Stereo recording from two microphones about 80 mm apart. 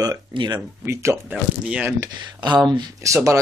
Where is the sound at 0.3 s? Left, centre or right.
Right.